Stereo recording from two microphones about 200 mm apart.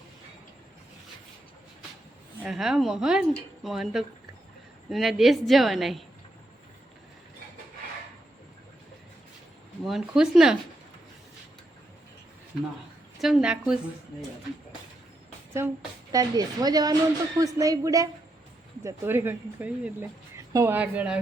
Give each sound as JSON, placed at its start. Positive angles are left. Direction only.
{"t": 2.4, "sound": "speech", "side_deg": 0}
{"t": 9.8, "sound": "speech", "side_deg": 0}
{"t": 13.1, "sound": "speech", "side_deg": 0}
{"t": 15.6, "sound": "speech", "side_deg": -10}